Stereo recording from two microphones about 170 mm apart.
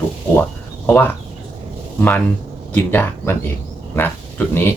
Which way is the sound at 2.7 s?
10° left (ahead or behind).